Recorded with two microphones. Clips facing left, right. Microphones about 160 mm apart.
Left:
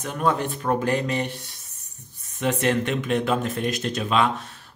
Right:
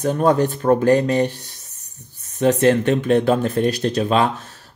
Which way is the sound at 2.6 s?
40° right (ahead or behind).